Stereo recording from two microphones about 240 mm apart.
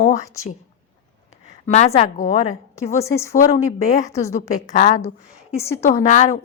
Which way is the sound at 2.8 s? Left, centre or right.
Centre.